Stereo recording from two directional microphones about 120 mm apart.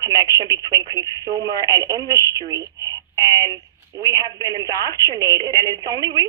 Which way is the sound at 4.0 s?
30° right (ahead or behind).